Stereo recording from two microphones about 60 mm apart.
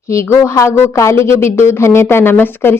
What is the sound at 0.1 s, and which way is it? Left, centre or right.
A woman's voice, left.